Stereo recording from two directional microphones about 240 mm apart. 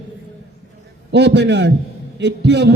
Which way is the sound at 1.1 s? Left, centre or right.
Right.